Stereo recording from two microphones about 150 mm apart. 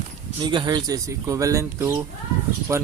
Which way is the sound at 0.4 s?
30° right (ahead or behind).